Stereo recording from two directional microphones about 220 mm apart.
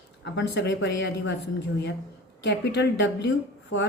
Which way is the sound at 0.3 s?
50° left (ahead or behind).